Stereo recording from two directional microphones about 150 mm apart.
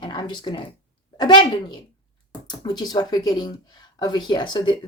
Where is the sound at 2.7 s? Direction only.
30° left (ahead or behind).